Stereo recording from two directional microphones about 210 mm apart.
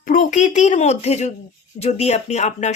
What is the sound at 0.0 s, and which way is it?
A woman's voice, 40° left (ahead or behind).